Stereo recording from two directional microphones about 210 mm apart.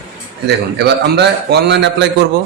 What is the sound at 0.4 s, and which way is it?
A man's voice, 50° right (ahead or behind).